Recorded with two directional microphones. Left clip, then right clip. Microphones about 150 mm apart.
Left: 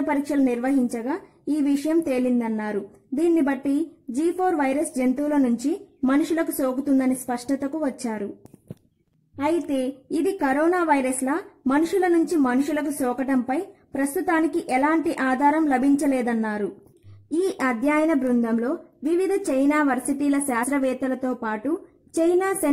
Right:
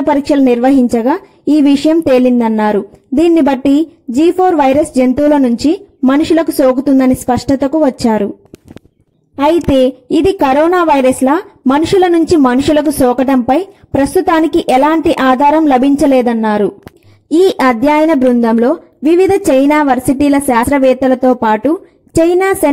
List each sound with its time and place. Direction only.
0.0 s a woman's voice: 30° right (ahead or behind)
9.4 s a woman's voice: 40° right (ahead or behind)